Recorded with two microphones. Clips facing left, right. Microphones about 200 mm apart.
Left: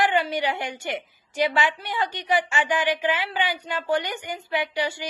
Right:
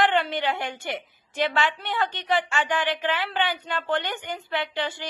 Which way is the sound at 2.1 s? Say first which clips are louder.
Left 1 dB; 15° left (ahead or behind).